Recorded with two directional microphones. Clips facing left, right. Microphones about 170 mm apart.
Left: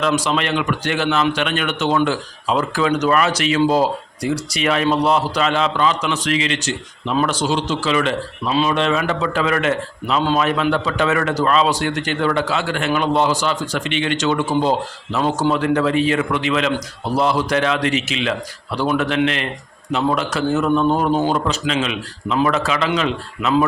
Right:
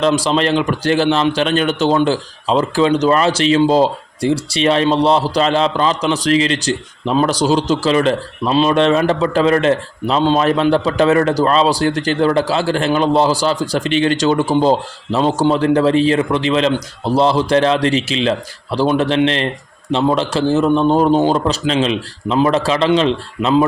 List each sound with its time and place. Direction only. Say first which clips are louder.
0.0 s a man's voice: right 4 dB; 30° right (ahead or behind)